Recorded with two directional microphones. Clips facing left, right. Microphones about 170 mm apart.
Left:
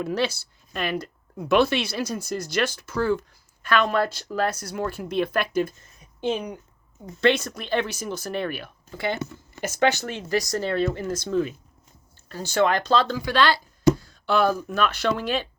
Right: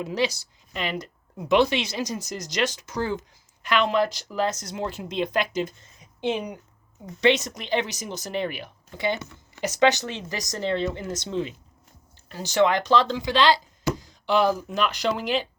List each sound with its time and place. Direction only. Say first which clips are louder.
0.0 s speech: left 1 dB; 15° right (ahead or behind)